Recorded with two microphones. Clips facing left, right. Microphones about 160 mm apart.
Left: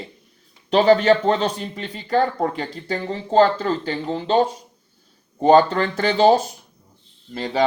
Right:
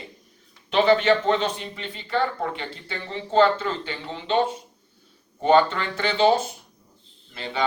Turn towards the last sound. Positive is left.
turn(degrees=40)  # may be behind; listen again after turning